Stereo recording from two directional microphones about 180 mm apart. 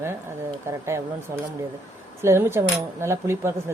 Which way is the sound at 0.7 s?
15° right (ahead or behind).